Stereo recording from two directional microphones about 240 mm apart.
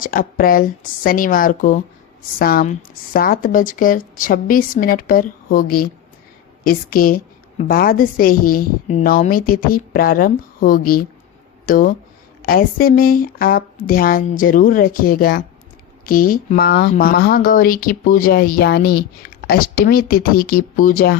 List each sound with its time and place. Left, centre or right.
0.0 s speech: left